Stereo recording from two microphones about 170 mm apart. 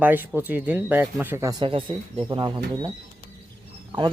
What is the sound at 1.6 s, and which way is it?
A man's voice, 30° right (ahead or behind).